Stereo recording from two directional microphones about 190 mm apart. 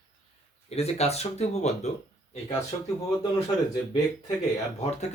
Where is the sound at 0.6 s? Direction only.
35° left (ahead or behind).